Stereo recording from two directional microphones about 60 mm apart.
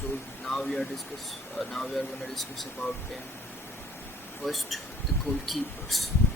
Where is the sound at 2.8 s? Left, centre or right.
Left.